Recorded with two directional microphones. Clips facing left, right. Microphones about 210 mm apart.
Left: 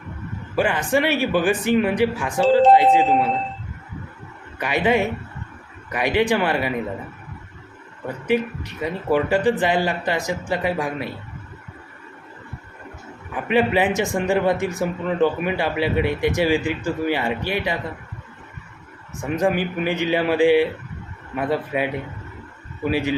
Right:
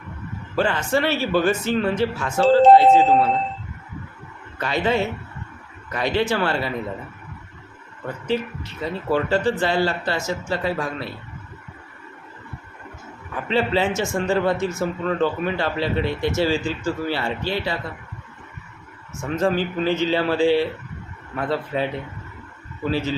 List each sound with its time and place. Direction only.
0.5 s a man's voice: 15° left (ahead or behind)
4.5 s a man's voice: 15° left (ahead or behind)
8.3 s a man's voice: 15° left (ahead or behind)
13.3 s a man's voice: 15° left (ahead or behind)
19.2 s a man's voice: 15° left (ahead or behind)